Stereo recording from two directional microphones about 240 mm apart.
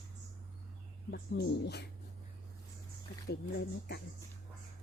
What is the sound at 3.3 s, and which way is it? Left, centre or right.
Speech, left.